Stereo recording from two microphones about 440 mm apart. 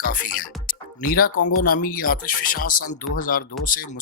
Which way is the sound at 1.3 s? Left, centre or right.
Left.